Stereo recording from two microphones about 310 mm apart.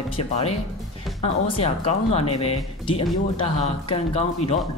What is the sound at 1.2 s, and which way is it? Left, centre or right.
Speech, centre.